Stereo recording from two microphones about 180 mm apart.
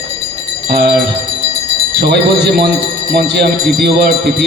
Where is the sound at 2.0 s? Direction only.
65° right (ahead or behind).